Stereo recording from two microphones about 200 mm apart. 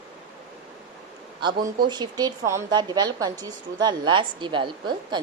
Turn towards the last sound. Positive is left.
turn(degrees=-25)  # may be behind; listen again after turning